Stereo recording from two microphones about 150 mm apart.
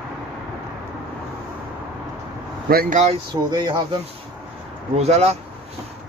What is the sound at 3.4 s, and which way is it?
Speech, 30° right (ahead or behind).